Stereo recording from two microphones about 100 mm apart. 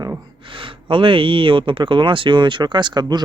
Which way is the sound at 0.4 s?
60° right (ahead or behind).